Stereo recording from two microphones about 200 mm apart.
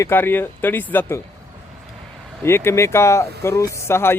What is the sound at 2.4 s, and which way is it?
Speech, 10° left (ahead or behind).